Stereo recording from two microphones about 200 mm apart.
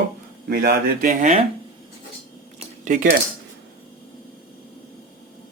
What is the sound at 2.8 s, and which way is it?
Cutlery, 40° right (ahead or behind).